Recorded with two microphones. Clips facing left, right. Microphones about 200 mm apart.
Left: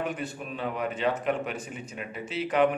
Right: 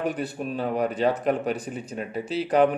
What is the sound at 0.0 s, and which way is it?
Speech, 35° right (ahead or behind).